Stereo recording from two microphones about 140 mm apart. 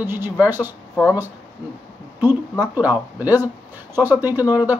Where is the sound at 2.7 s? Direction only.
10° right (ahead or behind).